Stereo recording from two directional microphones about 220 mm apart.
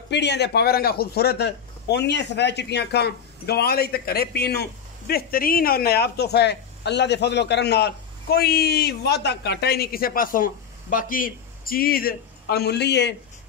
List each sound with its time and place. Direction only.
0.1 s a man's voice: 50° left (ahead or behind)